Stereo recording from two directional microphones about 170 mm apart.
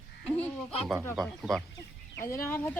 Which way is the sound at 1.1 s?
Centre (ahead or behind).